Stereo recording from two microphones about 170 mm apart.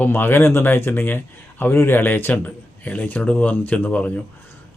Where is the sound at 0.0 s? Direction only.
10° left (ahead or behind).